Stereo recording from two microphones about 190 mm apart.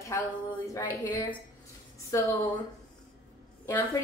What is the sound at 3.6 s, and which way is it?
Speech, 15° left (ahead or behind).